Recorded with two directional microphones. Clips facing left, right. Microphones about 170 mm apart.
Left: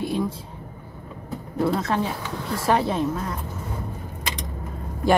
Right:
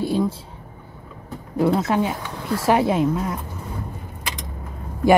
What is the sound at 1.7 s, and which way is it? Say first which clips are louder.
Speech: right 4 dB; 20° right (ahead or behind).